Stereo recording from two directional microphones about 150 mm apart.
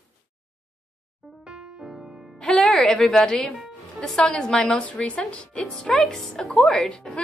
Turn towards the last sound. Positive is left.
turn(degrees=5)  # may be behind; listen again after turning